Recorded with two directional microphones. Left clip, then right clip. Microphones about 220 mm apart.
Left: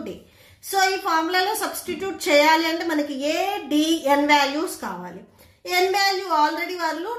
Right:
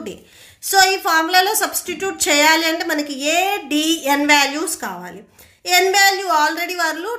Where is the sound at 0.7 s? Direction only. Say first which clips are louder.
Right 6 dB; 35° right (ahead or behind).